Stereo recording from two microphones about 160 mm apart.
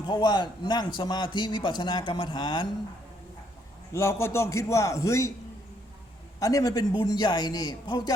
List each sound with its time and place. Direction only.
0.0 s a man's voice: 25° left (ahead or behind)
3.9 s a man's voice: 15° left (ahead or behind)
6.4 s a man's voice: 20° left (ahead or behind)